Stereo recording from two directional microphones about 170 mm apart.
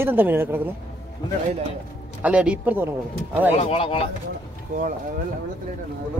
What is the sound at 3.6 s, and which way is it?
Speech, 35° left (ahead or behind).